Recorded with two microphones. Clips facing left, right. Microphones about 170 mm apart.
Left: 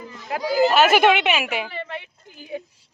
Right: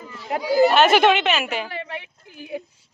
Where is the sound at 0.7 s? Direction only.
5° left (ahead or behind).